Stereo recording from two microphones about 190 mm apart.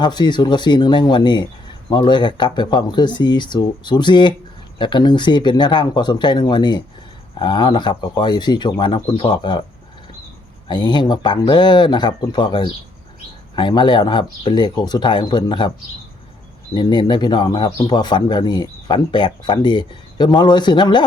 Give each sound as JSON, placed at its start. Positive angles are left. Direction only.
{"t": 0.0, "sound": "a man's voice", "side_deg": 25}
{"t": 10.7, "sound": "a man's voice", "side_deg": 20}
{"t": 16.7, "sound": "a man's voice", "side_deg": 20}